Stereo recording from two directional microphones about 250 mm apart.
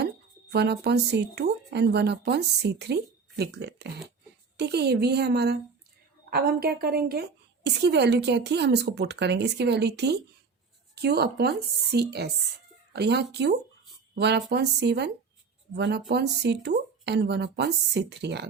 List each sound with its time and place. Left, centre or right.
0.5 s a woman's voice: right